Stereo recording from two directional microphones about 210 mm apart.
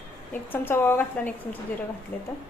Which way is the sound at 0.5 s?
10° left (ahead or behind).